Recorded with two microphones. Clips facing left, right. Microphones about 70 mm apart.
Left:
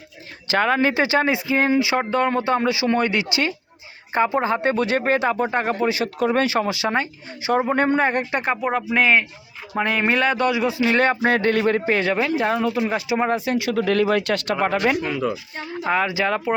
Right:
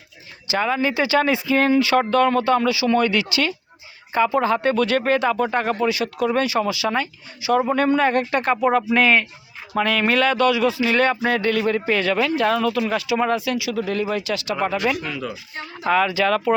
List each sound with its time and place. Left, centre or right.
0.4 s speech: left
1.0 s speech: left
10.8 s speech: left
12.0 s speech: left
13.6 s speech: left
15.0 s speech: left